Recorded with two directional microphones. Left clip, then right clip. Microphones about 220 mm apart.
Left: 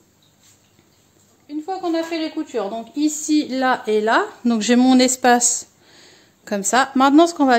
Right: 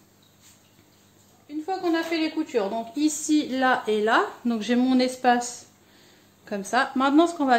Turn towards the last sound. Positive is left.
turn(degrees=50)  # may be behind; listen again after turning